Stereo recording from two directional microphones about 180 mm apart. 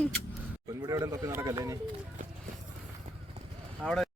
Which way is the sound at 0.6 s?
20° right (ahead or behind).